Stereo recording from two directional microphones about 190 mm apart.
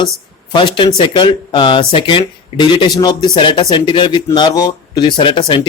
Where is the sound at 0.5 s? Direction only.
25° left (ahead or behind).